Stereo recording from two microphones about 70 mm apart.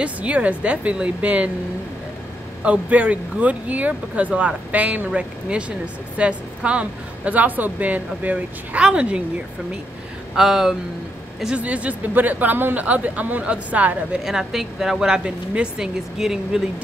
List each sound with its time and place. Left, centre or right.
0.0 s speech: centre
2.6 s speech: centre
10.3 s speech: centre
11.5 s speech: centre
14.2 s speech: centre